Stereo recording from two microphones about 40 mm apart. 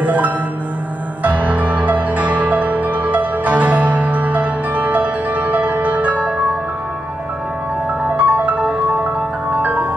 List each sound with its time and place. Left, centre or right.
0.0 s music: right
8.2 s music: right